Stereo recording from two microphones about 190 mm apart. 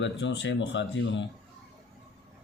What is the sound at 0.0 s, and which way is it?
Speech, 70° left (ahead or behind).